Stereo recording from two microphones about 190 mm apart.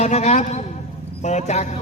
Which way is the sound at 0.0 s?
35° left (ahead or behind).